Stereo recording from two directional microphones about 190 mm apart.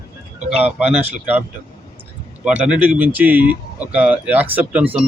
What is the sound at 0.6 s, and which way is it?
Speech, 10° right (ahead or behind).